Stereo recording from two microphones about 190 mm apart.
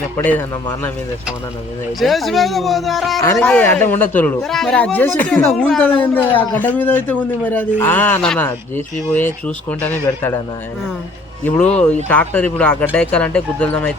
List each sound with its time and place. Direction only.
0.2 s speech: 10° left (ahead or behind)
2.0 s speech: centre (ahead or behind)
12.0 s speech: 10° left (ahead or behind)